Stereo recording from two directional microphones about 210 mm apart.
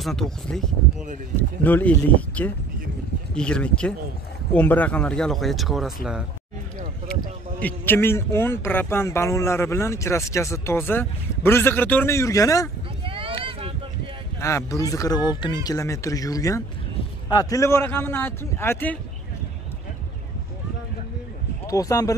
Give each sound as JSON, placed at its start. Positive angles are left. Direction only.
{"t": 0.0, "sound": "speech", "side_deg": 0}
{"t": 7.6, "sound": "speech", "side_deg": 10}
{"t": 13.0, "sound": "a sound", "side_deg": -25}
{"t": 14.4, "sound": "speech", "side_deg": 15}
{"t": 21.6, "sound": "speech", "side_deg": 15}